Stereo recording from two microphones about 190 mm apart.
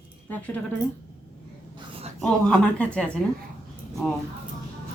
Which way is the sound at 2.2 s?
5° left (ahead or behind).